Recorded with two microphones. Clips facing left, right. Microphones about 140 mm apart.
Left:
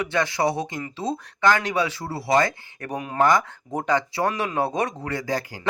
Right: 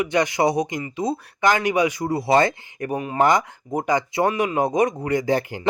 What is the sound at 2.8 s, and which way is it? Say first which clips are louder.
Speech: right 2 dB; 10° right (ahead or behind).